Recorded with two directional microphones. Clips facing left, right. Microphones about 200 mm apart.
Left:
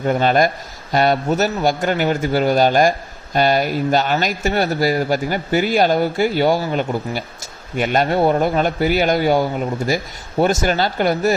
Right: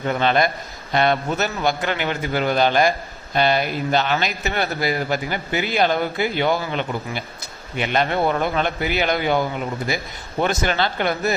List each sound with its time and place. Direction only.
0.0 s a man's voice: 40° left (ahead or behind)